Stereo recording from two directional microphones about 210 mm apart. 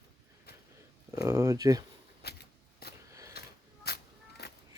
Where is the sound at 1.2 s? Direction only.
15° right (ahead or behind).